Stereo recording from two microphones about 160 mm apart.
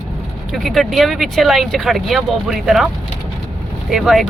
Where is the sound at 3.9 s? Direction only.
Centre (ahead or behind).